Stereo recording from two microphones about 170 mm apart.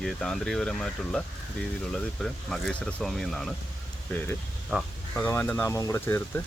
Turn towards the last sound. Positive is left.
turn(degrees=15)  # may be behind; listen again after turning